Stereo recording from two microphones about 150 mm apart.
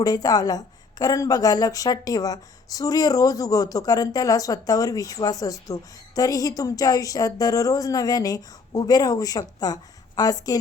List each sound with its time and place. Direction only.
0.0 s a woman's voice: 25° left (ahead or behind)